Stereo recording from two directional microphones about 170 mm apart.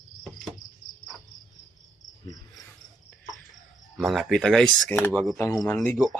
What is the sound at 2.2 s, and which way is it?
Cricket, 20° left (ahead or behind).